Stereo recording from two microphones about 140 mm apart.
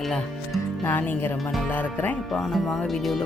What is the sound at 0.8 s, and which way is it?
Speech, 15° left (ahead or behind).